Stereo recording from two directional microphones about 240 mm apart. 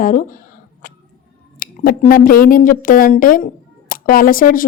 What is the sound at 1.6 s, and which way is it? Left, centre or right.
Speech, left.